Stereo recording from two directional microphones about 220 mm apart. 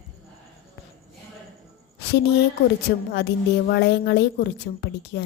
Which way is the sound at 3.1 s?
50° left (ahead or behind).